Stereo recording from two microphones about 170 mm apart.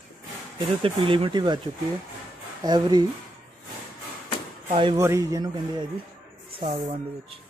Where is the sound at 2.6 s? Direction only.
25° right (ahead or behind).